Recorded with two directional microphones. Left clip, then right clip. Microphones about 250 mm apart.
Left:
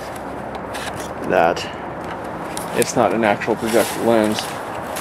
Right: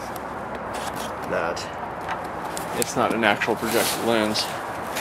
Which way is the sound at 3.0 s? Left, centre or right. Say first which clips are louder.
Left 3 dB; centre.